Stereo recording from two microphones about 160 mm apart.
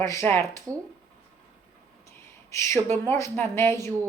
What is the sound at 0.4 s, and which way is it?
Speech, 20° right (ahead or behind).